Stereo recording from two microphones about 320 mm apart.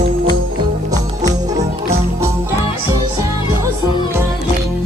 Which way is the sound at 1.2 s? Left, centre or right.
Centre.